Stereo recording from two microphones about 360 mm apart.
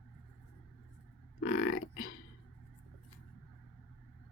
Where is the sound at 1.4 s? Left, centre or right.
Left.